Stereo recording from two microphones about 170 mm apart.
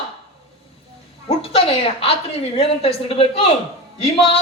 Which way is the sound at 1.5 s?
35° left (ahead or behind).